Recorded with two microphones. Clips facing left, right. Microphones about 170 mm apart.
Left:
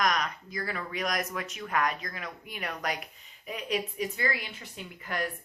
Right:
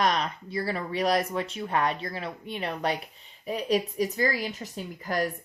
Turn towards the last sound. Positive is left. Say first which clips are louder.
# right 5 dB
turn(degrees=-35)  # may be behind; listen again after turning